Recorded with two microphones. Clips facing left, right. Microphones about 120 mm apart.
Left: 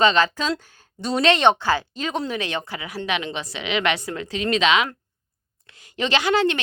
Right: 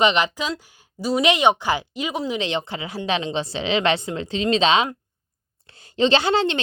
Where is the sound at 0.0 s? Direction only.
15° right (ahead or behind).